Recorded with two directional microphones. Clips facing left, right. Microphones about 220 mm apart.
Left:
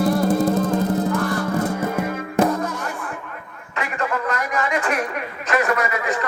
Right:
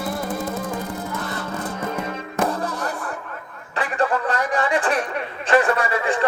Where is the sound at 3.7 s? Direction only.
30° right (ahead or behind).